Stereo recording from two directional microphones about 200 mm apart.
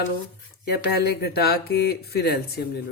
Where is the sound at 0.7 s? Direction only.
50° left (ahead or behind).